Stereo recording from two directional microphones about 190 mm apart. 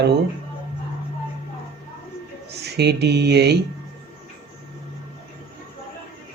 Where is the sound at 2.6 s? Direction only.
60° right (ahead or behind).